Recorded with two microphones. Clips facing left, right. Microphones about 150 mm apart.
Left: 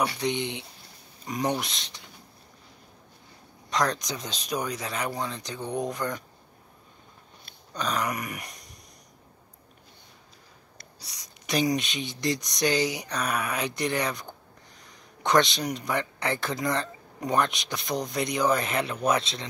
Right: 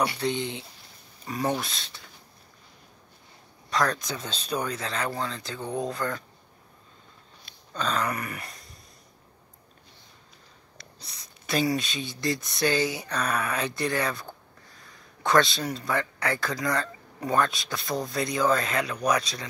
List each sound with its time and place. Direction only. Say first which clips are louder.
0.0 s speech: even; 15° left (ahead or behind)
3.7 s speech: even; 20° left (ahead or behind)
7.7 s a sound: right 1 dB; 15° left (ahead or behind)
11.0 s speech: even; 15° left (ahead or behind)